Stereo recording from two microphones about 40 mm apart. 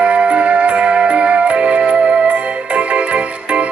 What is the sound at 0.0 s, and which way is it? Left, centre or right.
Music, right.